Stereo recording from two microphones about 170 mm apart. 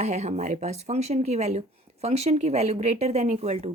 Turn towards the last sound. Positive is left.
turn(degrees=-35)  # may be behind; listen again after turning